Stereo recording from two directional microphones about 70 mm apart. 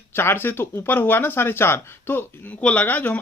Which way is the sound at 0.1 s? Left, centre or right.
Left.